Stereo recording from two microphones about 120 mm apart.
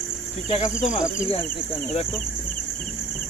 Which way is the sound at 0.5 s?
90° left.